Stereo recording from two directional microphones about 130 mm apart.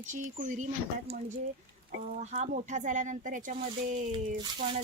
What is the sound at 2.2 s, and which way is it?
Speech, 65° right (ahead or behind).